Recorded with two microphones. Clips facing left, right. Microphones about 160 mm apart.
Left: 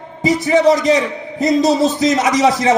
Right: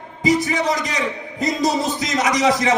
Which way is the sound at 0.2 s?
25° left (ahead or behind).